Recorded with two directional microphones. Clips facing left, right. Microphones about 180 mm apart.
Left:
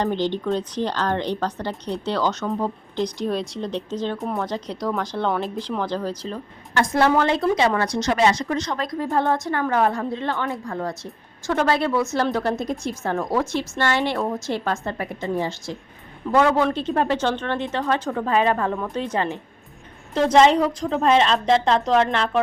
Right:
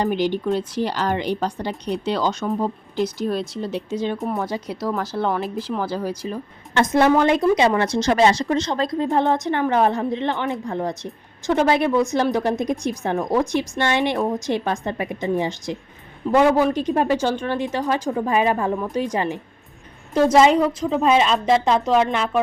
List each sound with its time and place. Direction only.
0.0 s speech: 10° right (ahead or behind)